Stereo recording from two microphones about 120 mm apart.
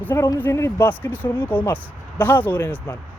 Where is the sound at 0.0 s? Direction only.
15° left (ahead or behind).